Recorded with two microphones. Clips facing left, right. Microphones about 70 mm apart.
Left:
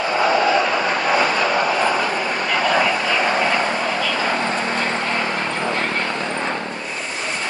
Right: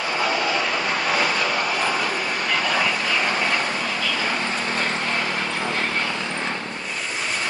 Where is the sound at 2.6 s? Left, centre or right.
Left.